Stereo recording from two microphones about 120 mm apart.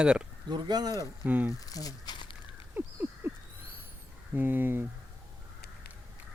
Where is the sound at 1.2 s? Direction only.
15° right (ahead or behind).